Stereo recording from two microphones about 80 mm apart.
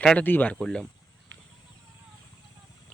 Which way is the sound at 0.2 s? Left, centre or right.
Left.